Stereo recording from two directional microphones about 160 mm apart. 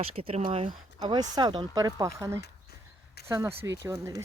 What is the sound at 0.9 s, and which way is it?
Speech, 25° right (ahead or behind).